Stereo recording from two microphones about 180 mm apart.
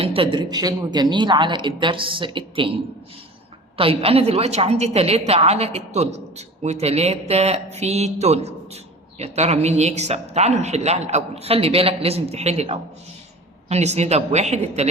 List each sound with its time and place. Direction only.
0.0 s a woman's voice: 30° right (ahead or behind)